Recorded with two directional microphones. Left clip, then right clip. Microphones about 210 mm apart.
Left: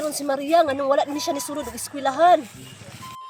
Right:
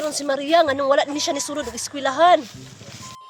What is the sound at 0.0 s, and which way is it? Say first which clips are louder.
A woman's voice: right 2 dB; centre (ahead or behind).